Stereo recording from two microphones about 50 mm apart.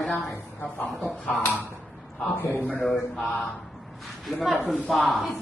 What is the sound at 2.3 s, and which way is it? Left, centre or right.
Speech, left.